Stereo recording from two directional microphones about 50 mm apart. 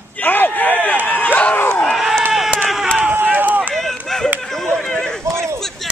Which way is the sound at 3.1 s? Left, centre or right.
Right.